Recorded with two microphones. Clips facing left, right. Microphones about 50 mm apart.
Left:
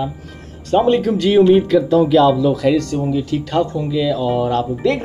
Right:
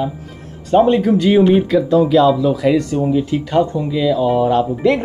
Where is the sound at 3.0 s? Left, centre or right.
Right.